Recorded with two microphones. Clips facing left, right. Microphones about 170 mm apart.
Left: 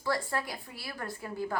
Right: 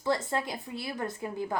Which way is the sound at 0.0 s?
20° right (ahead or behind).